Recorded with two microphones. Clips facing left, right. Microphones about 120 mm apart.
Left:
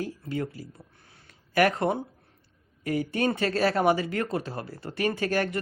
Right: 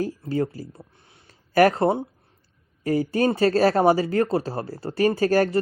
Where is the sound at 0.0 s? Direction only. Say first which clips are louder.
Right 6 dB; 35° right (ahead or behind).